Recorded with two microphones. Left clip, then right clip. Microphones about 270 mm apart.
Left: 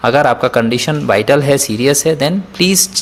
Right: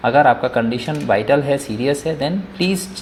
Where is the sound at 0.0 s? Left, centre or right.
Left.